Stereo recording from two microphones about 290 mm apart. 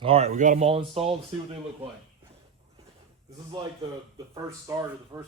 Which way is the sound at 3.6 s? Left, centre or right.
Centre.